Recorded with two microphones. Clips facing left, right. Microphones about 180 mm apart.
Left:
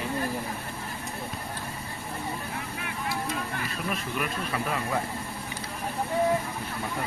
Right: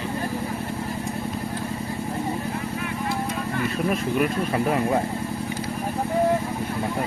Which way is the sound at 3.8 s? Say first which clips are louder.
Right 9 dB; 40° right (ahead or behind).